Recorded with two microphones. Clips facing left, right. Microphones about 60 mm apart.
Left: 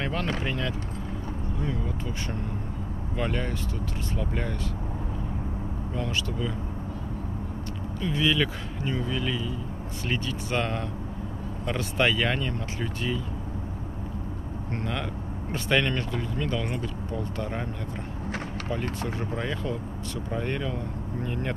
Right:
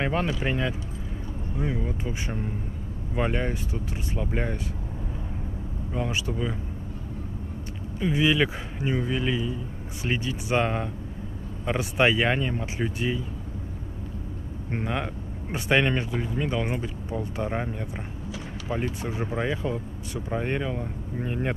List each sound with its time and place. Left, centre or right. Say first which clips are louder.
0.0 s speech: right 3 dB; centre
3.2 s speech: right 3 dB; right
5.9 s speech: right 2 dB; centre
8.0 s speech: right 3 dB; centre
14.7 s speech: right 3 dB; centre
18.9 s speech: right 2 dB; centre